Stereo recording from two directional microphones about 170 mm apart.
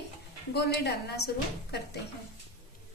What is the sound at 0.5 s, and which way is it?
A woman's voice, 75° left (ahead or behind).